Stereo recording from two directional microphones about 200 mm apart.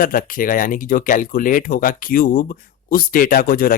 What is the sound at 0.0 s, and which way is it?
Speech, 45° left (ahead or behind).